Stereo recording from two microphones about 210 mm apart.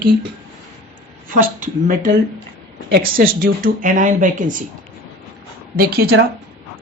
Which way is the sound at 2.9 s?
45° right (ahead or behind).